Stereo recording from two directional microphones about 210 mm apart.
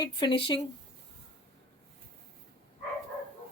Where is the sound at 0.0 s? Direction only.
20° left (ahead or behind).